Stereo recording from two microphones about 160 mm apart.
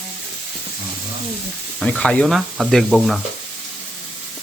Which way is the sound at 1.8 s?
5° left (ahead or behind).